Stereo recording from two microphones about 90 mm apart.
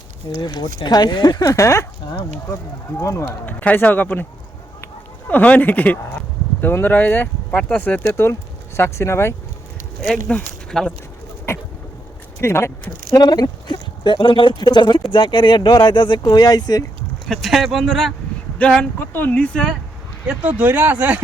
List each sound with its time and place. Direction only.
0.3 s speech: 50° left (ahead or behind)
1.5 s speech: 35° left (ahead or behind)
3.0 s speech: 35° left (ahead or behind)
3.4 s speech: 20° left (ahead or behind)
5.3 s speech: 20° left (ahead or behind)
8.1 s speech: 30° left (ahead or behind)
10.1 s speech: 10° left (ahead or behind)
12.4 s speech: 30° left (ahead or behind)
13.1 s speech: 45° left (ahead or behind)
17.2 s speech: 5° left (ahead or behind)
18.6 s speech: 15° left (ahead or behind)
20.2 s speech: 10° right (ahead or behind)